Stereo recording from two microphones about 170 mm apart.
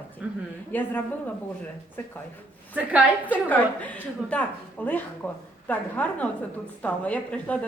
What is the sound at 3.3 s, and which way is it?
A woman's voice, 10° left (ahead or behind).